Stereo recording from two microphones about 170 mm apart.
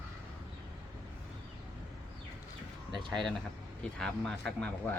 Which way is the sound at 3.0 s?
Centre (ahead or behind).